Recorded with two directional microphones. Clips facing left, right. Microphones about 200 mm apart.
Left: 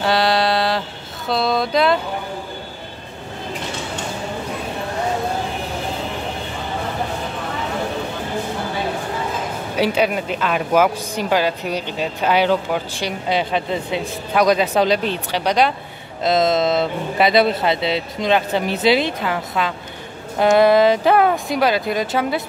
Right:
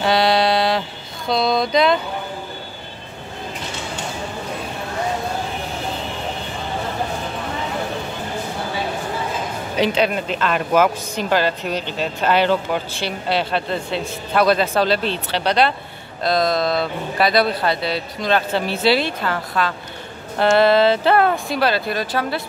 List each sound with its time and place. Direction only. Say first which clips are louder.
0.0 s mantra: right 1 dB; centre (ahead or behind)
9.8 s speech: even; 10° left (ahead or behind)
16.2 s speech: left 2 dB; 20° left (ahead or behind)